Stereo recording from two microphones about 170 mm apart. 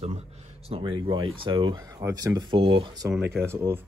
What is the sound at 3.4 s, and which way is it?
Speech, 15° right (ahead or behind).